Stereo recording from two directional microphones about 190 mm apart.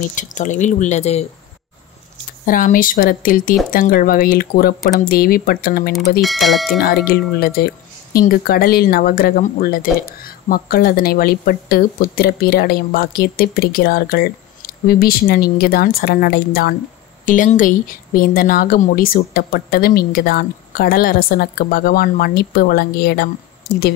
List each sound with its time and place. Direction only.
0.1 s speech: 40° left (ahead or behind)
2.4 s speech: 45° left (ahead or behind)
6.2 s speech: centre (ahead or behind)
7.1 s speech: 55° left (ahead or behind)